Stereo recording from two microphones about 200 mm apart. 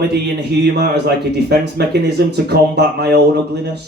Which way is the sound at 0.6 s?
55° right (ahead or behind).